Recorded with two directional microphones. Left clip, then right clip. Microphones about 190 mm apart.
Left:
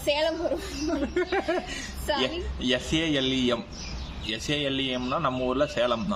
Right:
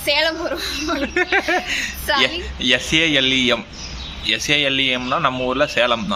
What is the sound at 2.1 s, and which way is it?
Speech, 20° left (ahead or behind).